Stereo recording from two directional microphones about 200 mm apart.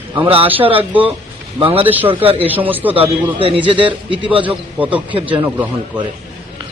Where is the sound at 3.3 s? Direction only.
25° right (ahead or behind).